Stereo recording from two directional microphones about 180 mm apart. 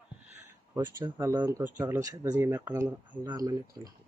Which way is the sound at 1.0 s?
15° right (ahead or behind).